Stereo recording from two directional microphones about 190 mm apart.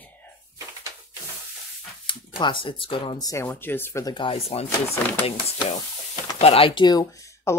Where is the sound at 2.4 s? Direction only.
25° left (ahead or behind).